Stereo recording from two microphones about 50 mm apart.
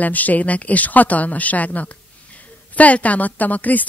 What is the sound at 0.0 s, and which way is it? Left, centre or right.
Speech, left.